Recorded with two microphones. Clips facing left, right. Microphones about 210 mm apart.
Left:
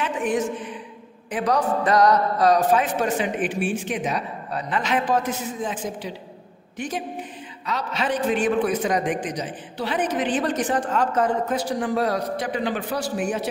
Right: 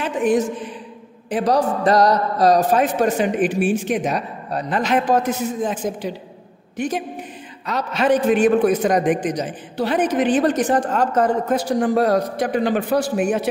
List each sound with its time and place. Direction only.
0.0 s a sound: 35° right (ahead or behind)
1.3 s a man's voice: 35° right (ahead or behind)
7.6 s a man's voice: 45° right (ahead or behind)